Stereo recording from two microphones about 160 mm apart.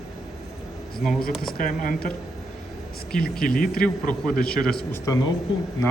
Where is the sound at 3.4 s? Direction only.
60° left (ahead or behind).